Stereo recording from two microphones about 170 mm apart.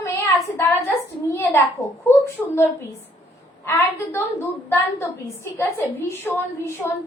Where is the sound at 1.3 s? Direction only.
10° left (ahead or behind).